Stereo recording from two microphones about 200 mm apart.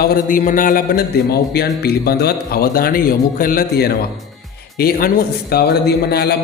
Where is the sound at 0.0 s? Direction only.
45° left (ahead or behind).